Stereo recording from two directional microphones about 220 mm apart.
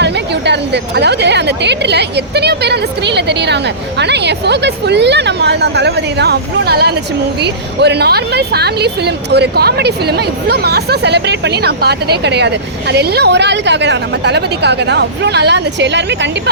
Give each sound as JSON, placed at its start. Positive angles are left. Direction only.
{"t": 0.0, "sound": "a woman's voice", "side_deg": -50}